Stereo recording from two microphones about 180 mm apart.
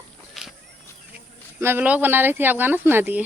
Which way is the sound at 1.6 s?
10° right (ahead or behind).